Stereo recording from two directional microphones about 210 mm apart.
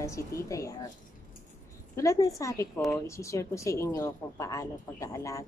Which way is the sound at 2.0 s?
15° left (ahead or behind).